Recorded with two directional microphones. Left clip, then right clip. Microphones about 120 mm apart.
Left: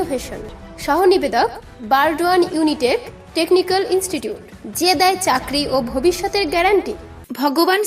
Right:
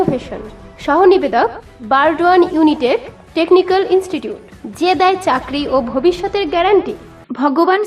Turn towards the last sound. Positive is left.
turn(degrees=25)  # may be behind; listen again after turning